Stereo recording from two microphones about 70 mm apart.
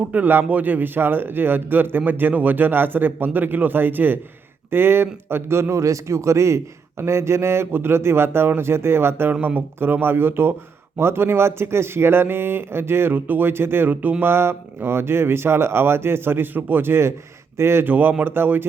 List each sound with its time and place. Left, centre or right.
0.1 s a man's voice: right
9.3 s speech: right
17.8 s a man's voice: right